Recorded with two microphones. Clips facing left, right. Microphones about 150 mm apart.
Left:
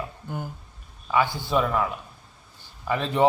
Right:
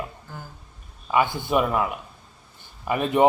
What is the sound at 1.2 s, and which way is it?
Speech, 55° right (ahead or behind).